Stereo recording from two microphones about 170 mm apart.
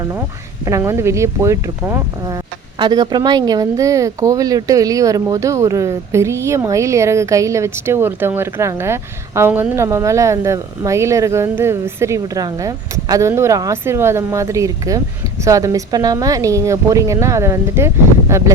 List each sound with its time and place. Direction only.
0.6 s a woman's voice: 15° right (ahead or behind)